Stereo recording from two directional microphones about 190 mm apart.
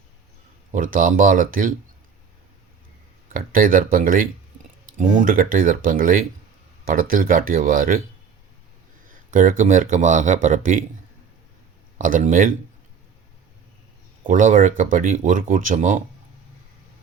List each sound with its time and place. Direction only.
0.7 s speech: 45° right (ahead or behind)
3.3 s speech: 45° right (ahead or behind)
9.0 s speech: 45° right (ahead or behind)
11.9 s speech: 45° right (ahead or behind)
14.3 s speech: 45° right (ahead or behind)